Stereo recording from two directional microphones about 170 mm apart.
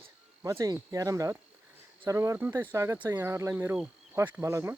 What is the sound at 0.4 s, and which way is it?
Speech, 20° right (ahead or behind).